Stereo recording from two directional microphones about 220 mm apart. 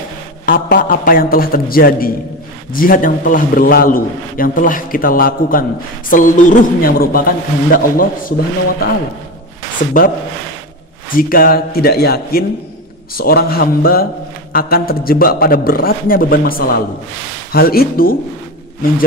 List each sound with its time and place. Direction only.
0.5 s a man's voice: 40° left (ahead or behind)
11.1 s a man's voice: 40° left (ahead or behind)